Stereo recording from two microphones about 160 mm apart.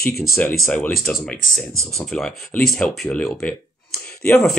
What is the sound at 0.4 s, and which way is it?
Speech, 10° left (ahead or behind).